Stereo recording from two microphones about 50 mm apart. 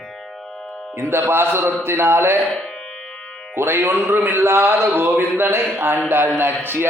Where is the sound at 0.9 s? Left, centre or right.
Right.